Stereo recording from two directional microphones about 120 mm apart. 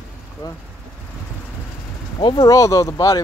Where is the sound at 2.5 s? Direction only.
25° left (ahead or behind).